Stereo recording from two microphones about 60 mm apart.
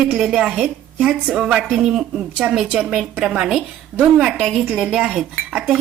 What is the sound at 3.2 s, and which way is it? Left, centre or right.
Speech, centre.